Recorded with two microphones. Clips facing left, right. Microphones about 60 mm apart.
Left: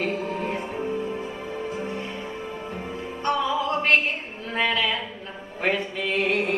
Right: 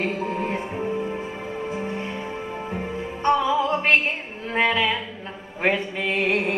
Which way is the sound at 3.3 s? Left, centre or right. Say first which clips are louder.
Right 4 dB; centre.